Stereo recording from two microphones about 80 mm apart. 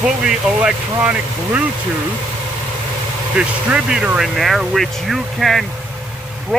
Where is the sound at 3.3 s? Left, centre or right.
Centre.